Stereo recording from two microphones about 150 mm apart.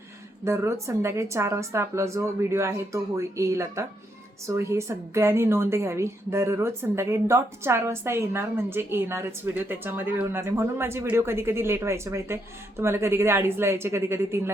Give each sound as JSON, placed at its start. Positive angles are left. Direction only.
{"t": 0.4, "sound": "a woman's voice", "side_deg": -20}